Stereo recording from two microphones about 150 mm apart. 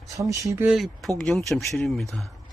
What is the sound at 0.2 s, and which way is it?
Speech, 20° right (ahead or behind).